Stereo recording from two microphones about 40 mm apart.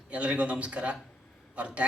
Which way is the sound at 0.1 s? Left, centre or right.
Right.